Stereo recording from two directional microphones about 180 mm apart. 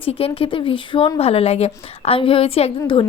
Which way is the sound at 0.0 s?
30° left (ahead or behind).